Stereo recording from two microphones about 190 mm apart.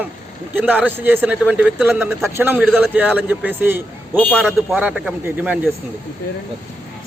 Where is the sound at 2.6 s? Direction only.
Centre (ahead or behind).